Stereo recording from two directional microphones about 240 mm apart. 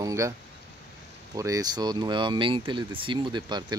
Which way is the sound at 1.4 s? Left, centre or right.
Centre.